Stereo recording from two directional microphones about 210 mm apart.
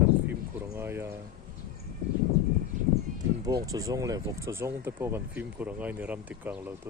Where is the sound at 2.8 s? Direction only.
35° right (ahead or behind).